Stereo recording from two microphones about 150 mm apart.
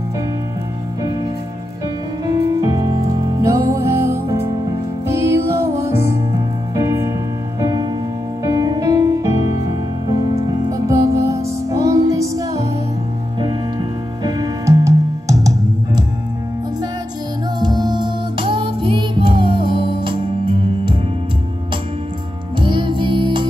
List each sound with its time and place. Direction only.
2.2 s music: 20° right (ahead or behind)
10.7 s music: 20° right (ahead or behind)
13.4 s music: 30° right (ahead or behind)
17.6 s music: 30° right (ahead or behind)
22.6 s music: 35° right (ahead or behind)